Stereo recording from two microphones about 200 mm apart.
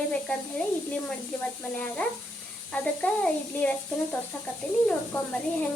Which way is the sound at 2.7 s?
5° left (ahead or behind).